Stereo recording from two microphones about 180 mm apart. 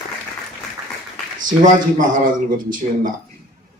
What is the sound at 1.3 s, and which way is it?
Speech, 45° right (ahead or behind).